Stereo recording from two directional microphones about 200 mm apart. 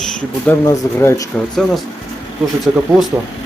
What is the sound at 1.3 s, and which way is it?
Speech, centre (ahead or behind).